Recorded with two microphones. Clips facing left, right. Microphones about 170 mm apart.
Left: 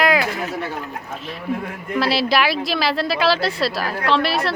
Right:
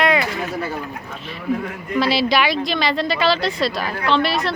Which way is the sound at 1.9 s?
Centre (ahead or behind).